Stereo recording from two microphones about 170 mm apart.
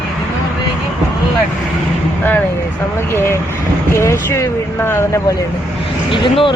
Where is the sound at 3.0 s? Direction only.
15° left (ahead or behind).